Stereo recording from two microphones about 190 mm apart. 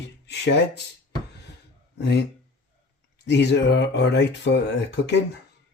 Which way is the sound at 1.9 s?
65° left (ahead or behind).